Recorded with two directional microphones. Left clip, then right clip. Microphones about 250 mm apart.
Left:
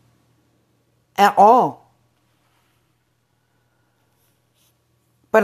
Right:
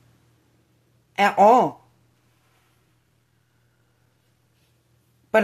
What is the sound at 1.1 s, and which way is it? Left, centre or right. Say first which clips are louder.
Speech: left 3 dB; left.